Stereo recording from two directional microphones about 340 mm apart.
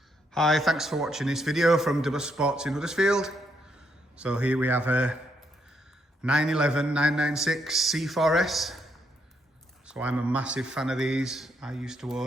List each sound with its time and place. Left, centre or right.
0.3 s a man's voice: centre
6.2 s a man's voice: centre
9.8 s a man's voice: centre